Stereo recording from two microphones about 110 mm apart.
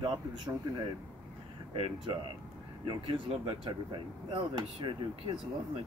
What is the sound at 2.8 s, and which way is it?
Speech, 45° right (ahead or behind).